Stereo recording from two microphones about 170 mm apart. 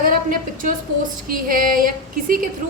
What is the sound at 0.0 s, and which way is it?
Speech, 55° right (ahead or behind).